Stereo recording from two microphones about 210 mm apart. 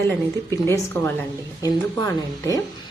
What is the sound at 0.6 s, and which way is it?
A woman's voice, 15° left (ahead or behind).